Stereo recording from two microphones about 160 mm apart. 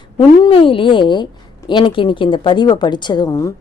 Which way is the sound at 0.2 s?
30° left (ahead or behind).